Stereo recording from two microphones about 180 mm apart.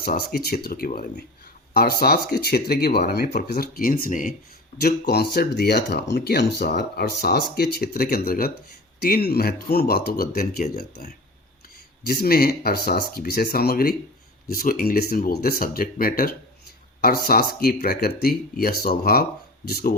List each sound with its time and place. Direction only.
0.0 s speech: 55° left (ahead or behind)
3.3 s speech: 50° left (ahead or behind)
4.8 s speech: 60° left (ahead or behind)